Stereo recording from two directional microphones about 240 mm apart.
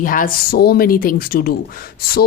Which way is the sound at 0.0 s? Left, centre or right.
Left.